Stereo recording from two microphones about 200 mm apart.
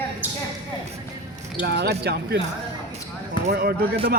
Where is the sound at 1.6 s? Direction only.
55° right (ahead or behind).